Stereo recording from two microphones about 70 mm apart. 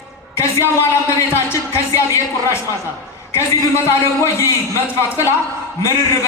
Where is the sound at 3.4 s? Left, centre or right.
Left.